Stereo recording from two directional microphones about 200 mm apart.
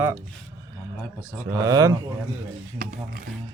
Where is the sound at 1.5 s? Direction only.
15° right (ahead or behind).